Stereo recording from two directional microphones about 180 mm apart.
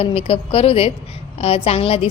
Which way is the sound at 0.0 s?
35° left (ahead or behind).